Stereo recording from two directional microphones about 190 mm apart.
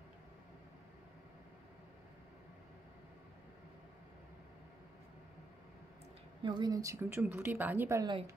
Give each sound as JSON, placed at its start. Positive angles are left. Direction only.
{"t": 6.4, "sound": "a woman's voice", "side_deg": -20}